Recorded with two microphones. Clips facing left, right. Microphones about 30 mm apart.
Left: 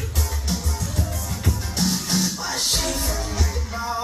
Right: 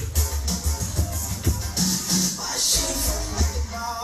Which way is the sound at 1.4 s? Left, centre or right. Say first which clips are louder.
Left 2 dB; centre.